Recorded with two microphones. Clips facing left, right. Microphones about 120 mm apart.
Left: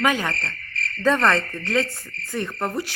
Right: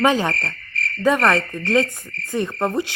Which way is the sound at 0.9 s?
10° right (ahead or behind).